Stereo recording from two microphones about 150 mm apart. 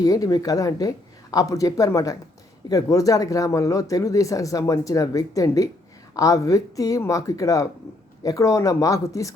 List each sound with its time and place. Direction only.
0.0 s speech: 25° left (ahead or behind)